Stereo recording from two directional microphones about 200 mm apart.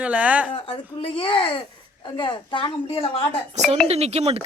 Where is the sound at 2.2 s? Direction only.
20° left (ahead or behind).